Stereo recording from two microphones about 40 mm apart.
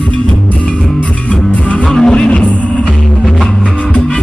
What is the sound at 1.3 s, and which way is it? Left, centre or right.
Music, left.